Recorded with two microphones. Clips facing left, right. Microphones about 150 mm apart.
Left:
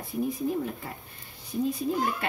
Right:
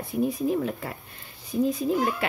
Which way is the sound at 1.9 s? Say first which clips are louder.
Right 3 dB; 90° right.